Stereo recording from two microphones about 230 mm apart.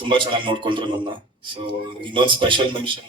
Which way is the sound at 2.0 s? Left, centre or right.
Right.